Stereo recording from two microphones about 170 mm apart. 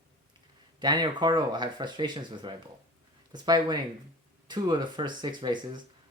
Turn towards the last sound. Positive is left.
turn(degrees=-25)  # may be behind; listen again after turning